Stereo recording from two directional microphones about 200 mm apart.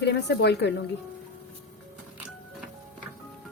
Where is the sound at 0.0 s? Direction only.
60° left (ahead or behind).